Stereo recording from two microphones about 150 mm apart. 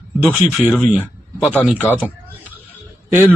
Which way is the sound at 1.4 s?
10° left (ahead or behind).